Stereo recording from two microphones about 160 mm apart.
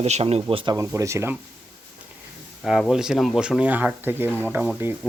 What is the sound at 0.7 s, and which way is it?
Speech, 20° right (ahead or behind).